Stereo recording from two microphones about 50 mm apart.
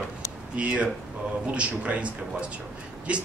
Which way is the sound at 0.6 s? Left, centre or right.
Right.